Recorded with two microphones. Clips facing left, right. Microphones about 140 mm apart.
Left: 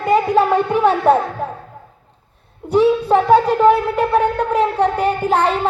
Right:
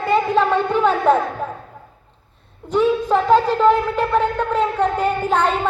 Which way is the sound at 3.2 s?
10° left (ahead or behind).